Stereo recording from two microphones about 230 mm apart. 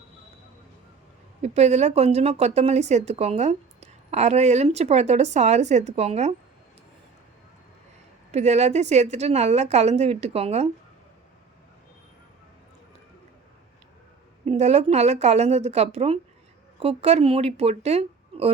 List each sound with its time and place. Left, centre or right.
1.4 s speech: right
8.3 s speech: right
14.4 s speech: right